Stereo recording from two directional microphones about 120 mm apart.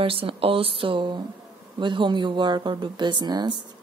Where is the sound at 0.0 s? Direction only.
50° right (ahead or behind).